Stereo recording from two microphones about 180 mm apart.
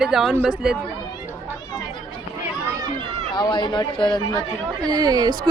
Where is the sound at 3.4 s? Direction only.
25° left (ahead or behind).